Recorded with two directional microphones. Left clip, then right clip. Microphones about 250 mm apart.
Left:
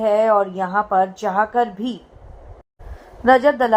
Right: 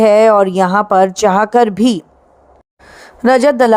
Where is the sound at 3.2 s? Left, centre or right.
Right.